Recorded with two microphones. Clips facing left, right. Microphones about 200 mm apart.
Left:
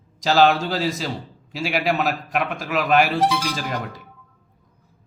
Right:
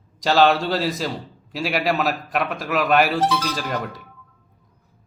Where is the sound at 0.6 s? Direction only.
Centre (ahead or behind).